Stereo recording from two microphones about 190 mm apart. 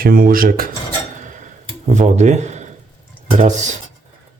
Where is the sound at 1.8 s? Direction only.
35° right (ahead or behind).